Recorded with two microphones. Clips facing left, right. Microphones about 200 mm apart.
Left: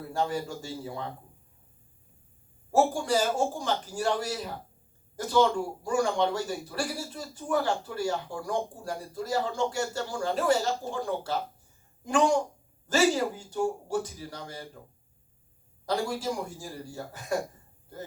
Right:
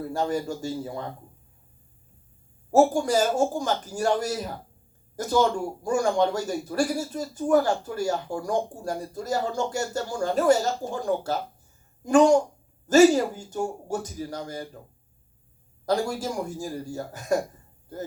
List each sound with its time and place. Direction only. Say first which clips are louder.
0.1 s speech: right 2 dB; 40° right (ahead or behind)
2.7 s speech: right 5 dB; 45° right (ahead or behind)
15.9 s speech: right 4 dB; 45° right (ahead or behind)